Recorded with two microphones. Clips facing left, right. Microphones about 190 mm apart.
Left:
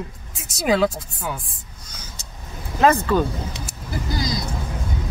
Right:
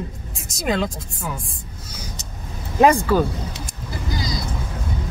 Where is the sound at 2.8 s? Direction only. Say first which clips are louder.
Right 2 dB; 10° right (ahead or behind).